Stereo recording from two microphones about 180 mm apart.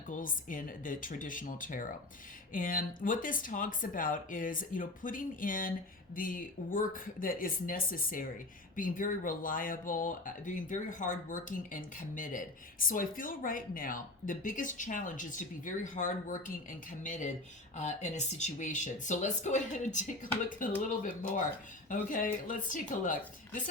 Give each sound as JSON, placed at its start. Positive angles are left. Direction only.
{"t": 0.1, "sound": "speech", "side_deg": 50}